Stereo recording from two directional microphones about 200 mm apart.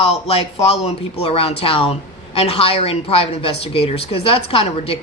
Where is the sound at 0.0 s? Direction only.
30° left (ahead or behind).